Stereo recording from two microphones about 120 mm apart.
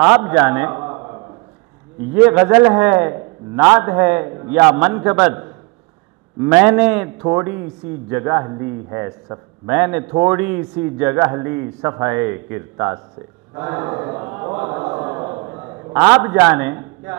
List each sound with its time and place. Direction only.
0.0 s a man's voice: 15° right (ahead or behind)
4.7 s a man's voice: 15° right (ahead or behind)